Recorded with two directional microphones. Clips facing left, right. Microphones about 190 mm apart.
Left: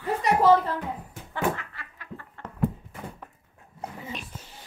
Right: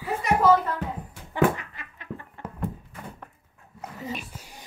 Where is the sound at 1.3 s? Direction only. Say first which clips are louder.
Right 5 dB; 20° right (ahead or behind).